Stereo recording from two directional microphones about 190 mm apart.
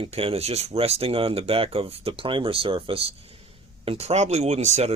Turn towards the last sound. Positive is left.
turn(degrees=-35)  # may be behind; listen again after turning